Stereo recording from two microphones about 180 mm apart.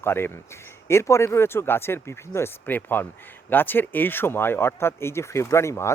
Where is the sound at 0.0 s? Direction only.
10° left (ahead or behind).